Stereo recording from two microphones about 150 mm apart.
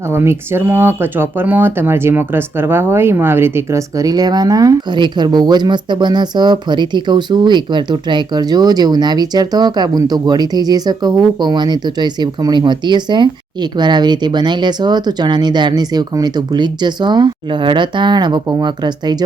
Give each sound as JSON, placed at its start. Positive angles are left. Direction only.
{"t": 0.1, "sound": "speech", "side_deg": -15}